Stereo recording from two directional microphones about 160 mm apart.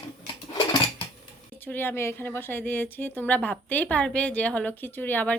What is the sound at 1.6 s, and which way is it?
A woman's voice, 10° left (ahead or behind).